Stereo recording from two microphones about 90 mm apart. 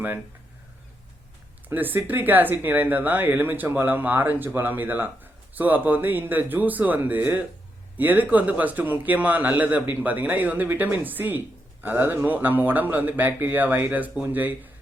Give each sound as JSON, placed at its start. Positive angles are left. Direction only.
{"t": 1.7, "sound": "a man's voice", "side_deg": -20}